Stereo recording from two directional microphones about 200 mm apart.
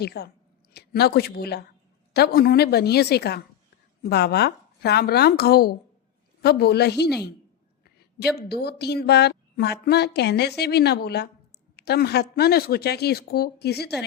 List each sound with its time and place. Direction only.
0.0 s a woman's voice: 55° left (ahead or behind)